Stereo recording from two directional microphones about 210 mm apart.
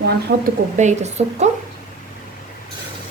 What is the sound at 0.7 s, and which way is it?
Speech, 35° right (ahead or behind).